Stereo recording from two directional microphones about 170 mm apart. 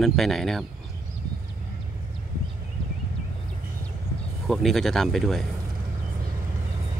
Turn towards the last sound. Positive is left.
turn(degrees=0)  # may be behind; listen again after turning